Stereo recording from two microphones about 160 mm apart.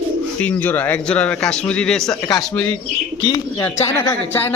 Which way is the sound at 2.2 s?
20° left (ahead or behind).